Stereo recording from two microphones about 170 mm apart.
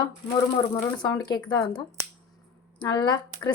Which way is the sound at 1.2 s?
25° left (ahead or behind).